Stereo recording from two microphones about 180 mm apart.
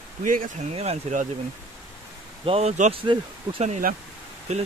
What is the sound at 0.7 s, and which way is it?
Speech, 35° right (ahead or behind).